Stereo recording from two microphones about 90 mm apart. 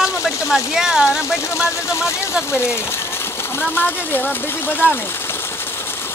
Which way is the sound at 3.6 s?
20° left (ahead or behind).